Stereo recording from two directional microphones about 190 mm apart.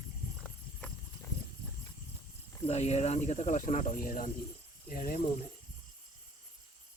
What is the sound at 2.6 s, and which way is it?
Speech, 35° left (ahead or behind).